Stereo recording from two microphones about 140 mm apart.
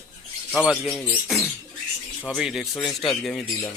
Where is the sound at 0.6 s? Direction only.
5° right (ahead or behind).